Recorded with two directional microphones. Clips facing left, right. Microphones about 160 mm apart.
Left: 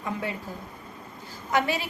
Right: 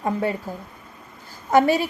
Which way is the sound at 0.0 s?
40° right (ahead or behind).